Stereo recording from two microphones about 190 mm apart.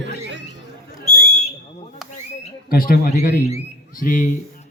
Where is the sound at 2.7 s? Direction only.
50° left (ahead or behind).